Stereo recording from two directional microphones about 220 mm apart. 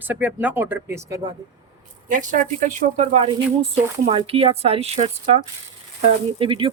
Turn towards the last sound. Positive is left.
turn(degrees=-25)  # may be behind; listen again after turning